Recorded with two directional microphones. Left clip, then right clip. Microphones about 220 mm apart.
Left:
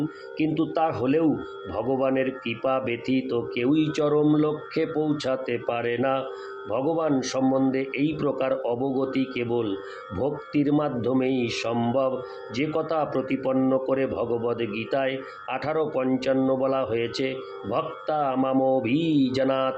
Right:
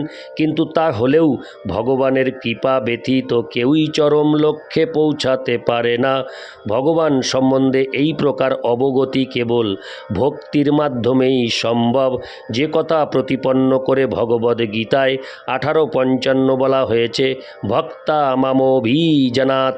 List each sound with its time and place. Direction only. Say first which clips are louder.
0.3 s speech: right 8 dB; 50° right (ahead or behind)